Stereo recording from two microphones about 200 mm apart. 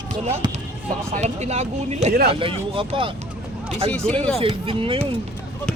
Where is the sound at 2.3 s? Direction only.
25° right (ahead or behind).